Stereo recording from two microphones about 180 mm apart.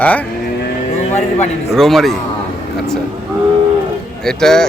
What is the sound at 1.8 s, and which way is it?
Speech, centre (ahead or behind).